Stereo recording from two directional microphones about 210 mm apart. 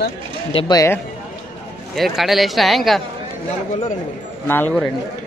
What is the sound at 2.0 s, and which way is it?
Speech, centre (ahead or behind).